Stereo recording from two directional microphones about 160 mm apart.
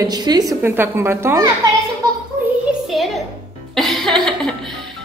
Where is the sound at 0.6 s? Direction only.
15° right (ahead or behind).